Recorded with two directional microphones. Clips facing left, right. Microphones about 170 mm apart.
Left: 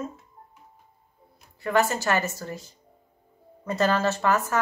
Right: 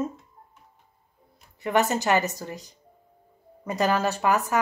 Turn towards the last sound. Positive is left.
turn(degrees=-15)  # may be behind; listen again after turning